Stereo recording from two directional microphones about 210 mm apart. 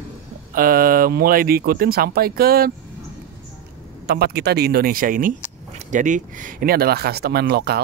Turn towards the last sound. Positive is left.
turn(degrees=-50)  # may be behind; listen again after turning